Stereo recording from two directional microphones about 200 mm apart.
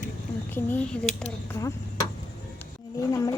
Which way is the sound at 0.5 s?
10° left (ahead or behind).